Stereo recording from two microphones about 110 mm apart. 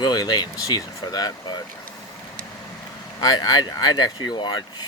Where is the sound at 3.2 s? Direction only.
35° left (ahead or behind).